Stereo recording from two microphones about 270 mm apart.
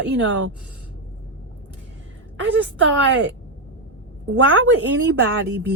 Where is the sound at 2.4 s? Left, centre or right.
Right.